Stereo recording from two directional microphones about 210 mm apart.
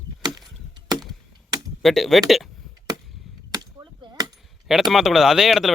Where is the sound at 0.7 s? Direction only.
20° right (ahead or behind).